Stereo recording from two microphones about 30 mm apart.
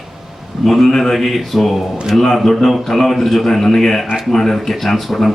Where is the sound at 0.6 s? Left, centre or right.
Centre.